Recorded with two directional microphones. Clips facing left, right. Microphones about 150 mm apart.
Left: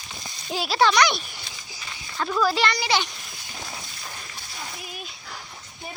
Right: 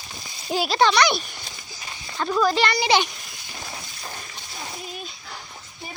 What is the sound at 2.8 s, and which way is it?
Speech, 20° right (ahead or behind).